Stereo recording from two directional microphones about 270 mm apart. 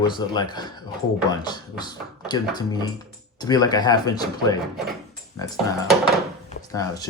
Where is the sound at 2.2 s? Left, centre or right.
Centre.